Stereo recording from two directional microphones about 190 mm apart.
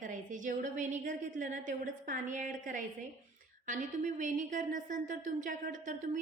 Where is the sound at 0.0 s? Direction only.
40° right (ahead or behind).